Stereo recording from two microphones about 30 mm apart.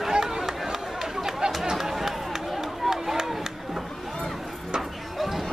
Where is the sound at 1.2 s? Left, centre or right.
Centre.